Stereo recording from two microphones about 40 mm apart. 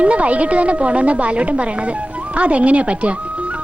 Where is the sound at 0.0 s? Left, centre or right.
Right.